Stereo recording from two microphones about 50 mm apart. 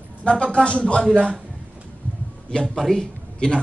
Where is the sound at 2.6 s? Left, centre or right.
Centre.